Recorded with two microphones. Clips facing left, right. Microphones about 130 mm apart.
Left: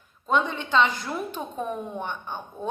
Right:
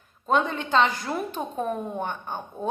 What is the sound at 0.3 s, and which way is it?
A woman's voice, 45° right (ahead or behind).